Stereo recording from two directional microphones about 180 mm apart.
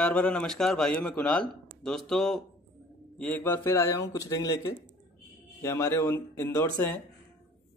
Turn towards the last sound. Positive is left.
turn(degrees=10)  # may be behind; listen again after turning